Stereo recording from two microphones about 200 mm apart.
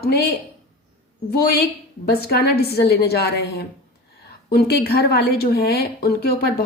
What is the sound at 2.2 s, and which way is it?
A woman's voice, 50° left (ahead or behind).